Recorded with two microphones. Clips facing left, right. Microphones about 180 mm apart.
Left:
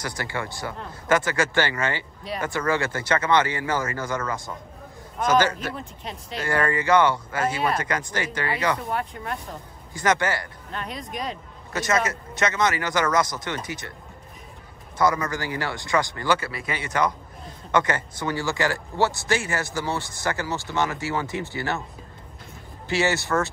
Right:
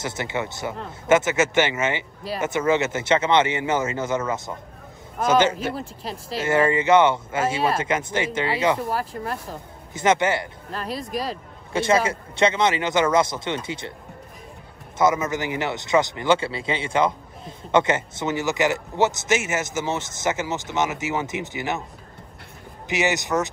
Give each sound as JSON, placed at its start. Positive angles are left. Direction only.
{"t": 0.0, "sound": "speech", "side_deg": -25}
{"t": 5.2, "sound": "speech", "side_deg": -25}
{"t": 15.0, "sound": "speech", "side_deg": -20}
{"t": 22.8, "sound": "speech", "side_deg": -15}